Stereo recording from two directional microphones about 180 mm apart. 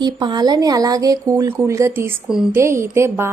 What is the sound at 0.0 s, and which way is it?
A woman's voice, 25° right (ahead or behind).